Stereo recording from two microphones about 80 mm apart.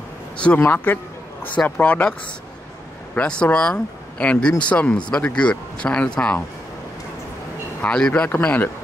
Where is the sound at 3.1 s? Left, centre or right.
Centre.